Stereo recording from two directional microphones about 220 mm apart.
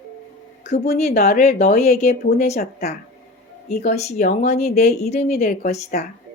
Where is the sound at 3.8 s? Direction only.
35° left (ahead or behind).